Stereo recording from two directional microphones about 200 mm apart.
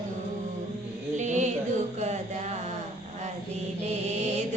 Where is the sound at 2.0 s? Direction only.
35° right (ahead or behind).